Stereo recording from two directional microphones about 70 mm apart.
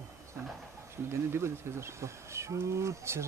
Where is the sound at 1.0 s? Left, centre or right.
Right.